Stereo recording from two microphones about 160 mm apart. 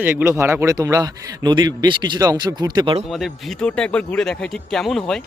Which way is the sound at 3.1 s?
Centre (ahead or behind).